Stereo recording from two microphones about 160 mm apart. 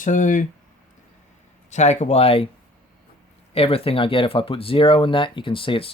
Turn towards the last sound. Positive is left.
turn(degrees=35)  # may be behind; listen again after turning